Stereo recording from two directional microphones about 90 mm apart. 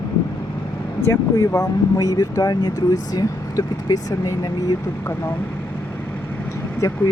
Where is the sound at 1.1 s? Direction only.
40° left (ahead or behind).